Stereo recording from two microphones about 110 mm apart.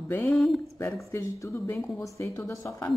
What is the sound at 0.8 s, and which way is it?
A woman's voice, 25° left (ahead or behind).